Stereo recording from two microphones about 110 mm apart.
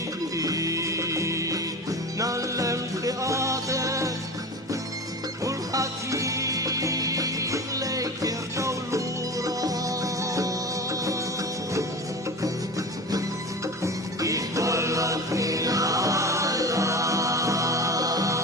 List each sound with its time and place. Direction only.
0.3 s music: 30° right (ahead or behind)
5.5 s music: 30° right (ahead or behind)
13.8 s music: 30° right (ahead or behind)